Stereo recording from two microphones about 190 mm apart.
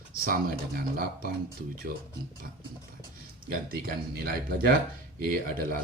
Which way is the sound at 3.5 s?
50° right (ahead or behind).